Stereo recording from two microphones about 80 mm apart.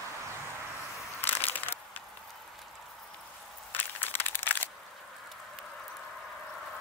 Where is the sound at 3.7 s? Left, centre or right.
Left.